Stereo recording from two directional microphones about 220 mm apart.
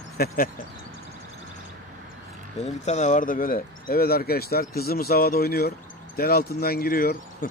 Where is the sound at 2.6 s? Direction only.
30° left (ahead or behind).